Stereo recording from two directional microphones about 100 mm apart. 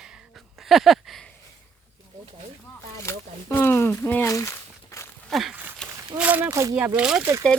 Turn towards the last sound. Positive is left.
turn(degrees=-25)  # may be behind; listen again after turning